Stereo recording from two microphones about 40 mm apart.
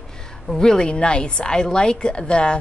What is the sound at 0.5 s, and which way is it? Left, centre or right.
A woman's voice, centre.